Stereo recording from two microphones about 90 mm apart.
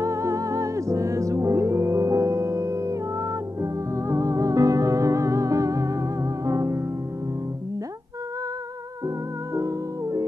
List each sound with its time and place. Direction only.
0.0 s music: 35° right (ahead or behind)
9.0 s music: 35° right (ahead or behind)